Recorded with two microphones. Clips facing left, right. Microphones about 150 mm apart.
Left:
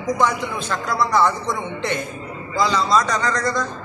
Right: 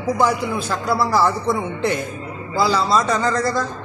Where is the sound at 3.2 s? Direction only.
30° right (ahead or behind).